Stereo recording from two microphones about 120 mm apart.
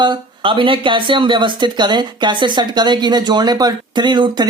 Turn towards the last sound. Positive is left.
turn(degrees=-40)  # may be behind; listen again after turning